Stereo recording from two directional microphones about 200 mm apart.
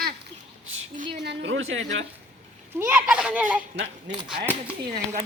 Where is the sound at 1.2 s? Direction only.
65° right (ahead or behind).